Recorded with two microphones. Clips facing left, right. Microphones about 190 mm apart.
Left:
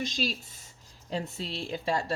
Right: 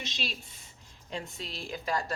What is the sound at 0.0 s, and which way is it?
Speech, 45° left (ahead or behind).